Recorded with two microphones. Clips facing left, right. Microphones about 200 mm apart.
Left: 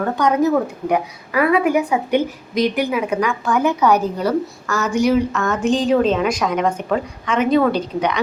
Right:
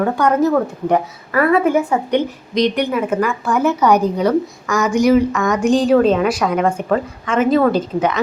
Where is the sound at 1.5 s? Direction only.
15° left (ahead or behind).